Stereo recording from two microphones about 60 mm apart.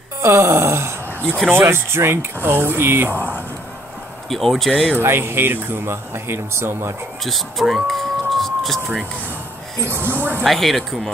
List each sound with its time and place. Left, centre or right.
0.2 s wail: right
1.5 s speech: right
4.3 s speech: centre
4.9 s speech: right
7.2 s speech: centre
9.8 s speech: right
10.4 s speech: centre